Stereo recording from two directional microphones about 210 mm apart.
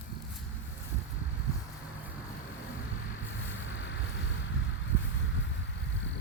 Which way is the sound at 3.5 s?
65° left (ahead or behind).